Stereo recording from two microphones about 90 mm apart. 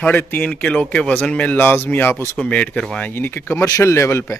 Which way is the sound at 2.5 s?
10° left (ahead or behind).